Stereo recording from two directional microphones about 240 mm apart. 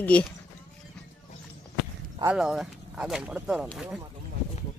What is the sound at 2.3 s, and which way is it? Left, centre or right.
Speech, centre.